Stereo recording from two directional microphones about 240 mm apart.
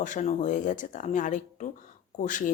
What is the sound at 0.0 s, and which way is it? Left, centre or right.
Speech, left.